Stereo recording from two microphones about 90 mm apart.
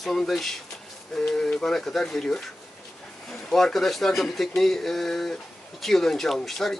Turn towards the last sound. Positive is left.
turn(degrees=0)  # may be behind; listen again after turning